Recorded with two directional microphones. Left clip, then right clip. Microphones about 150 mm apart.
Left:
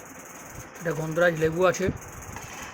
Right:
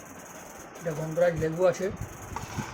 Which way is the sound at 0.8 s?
60° left (ahead or behind).